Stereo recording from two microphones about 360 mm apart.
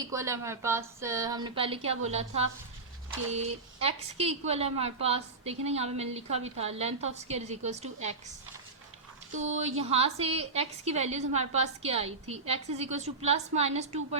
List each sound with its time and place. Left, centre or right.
0.1 s a woman's voice: centre
9.3 s speech: right
9.6 s a woman's voice: centre